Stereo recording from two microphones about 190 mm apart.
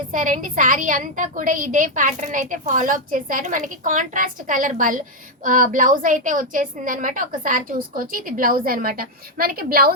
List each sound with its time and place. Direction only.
0.1 s a woman's voice: 45° right (ahead or behind)